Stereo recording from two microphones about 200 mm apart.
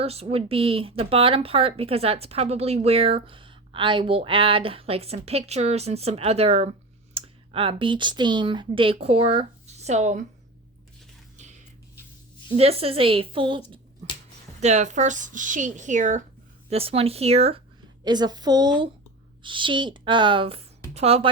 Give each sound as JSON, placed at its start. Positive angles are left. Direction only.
{"t": 0.0, "sound": "speech", "side_deg": -30}
{"t": 11.3, "sound": "music", "side_deg": -35}
{"t": 12.5, "sound": "speech", "side_deg": -30}
{"t": 14.0, "sound": "a sound", "side_deg": -30}
{"t": 14.6, "sound": "speech", "side_deg": -35}
{"t": 18.0, "sound": "speech", "side_deg": -20}